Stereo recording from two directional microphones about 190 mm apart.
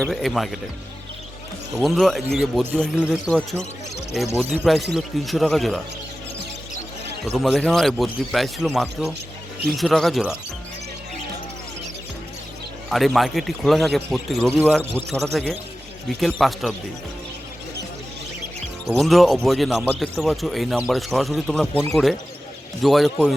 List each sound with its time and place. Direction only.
0.0 s a man's voice: centre (ahead or behind)
1.7 s a man's voice: centre (ahead or behind)
7.3 s a man's voice: centre (ahead or behind)
12.9 s a man's voice: centre (ahead or behind)
14.6 s a man's voice: 10° right (ahead or behind)
15.1 s a man's voice: centre (ahead or behind)
18.9 s a man's voice: centre (ahead or behind)
22.8 s a man's voice: centre (ahead or behind)